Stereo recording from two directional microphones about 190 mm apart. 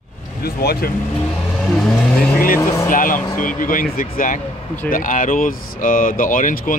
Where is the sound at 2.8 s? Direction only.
45° left (ahead or behind).